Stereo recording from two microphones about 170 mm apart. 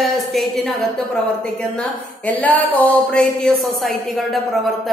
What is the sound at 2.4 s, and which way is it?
Speech, 10° left (ahead or behind).